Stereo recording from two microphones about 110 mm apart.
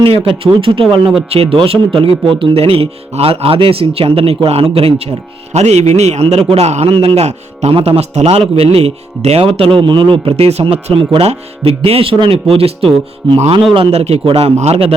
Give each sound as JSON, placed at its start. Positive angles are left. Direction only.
{"t": 0.0, "sound": "speech", "side_deg": -60}
{"t": 5.5, "sound": "a man's voice", "side_deg": -80}
{"t": 6.5, "sound": "a man's voice", "side_deg": -80}
{"t": 6.9, "sound": "speech", "side_deg": -60}
{"t": 7.7, "sound": "speech", "side_deg": -60}
{"t": 9.6, "sound": "a man's voice", "side_deg": -50}